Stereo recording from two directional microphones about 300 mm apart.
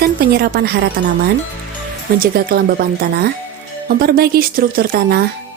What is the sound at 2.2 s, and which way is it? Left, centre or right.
Speech, right.